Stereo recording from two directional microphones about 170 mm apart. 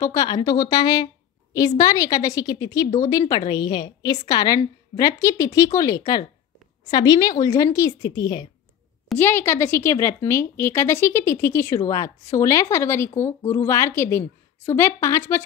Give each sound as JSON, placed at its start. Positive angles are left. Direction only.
{"t": 0.0, "sound": "a woman's voice", "side_deg": 20}
{"t": 9.1, "sound": "a woman's voice", "side_deg": 10}